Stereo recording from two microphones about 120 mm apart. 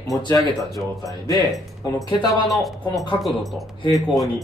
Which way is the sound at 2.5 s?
Centre (ahead or behind).